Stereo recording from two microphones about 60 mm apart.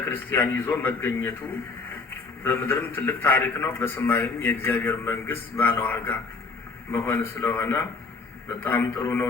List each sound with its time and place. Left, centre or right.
0.0 s a man's voice: left
2.4 s a man's voice: left